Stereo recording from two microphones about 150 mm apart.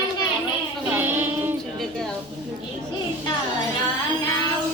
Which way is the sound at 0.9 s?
15° right (ahead or behind).